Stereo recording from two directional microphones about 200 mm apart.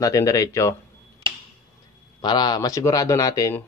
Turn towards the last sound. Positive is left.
turn(degrees=15)  # may be behind; listen again after turning